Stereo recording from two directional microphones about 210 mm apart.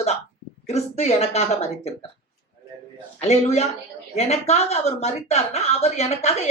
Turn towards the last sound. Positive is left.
turn(degrees=30)  # may be behind; listen again after turning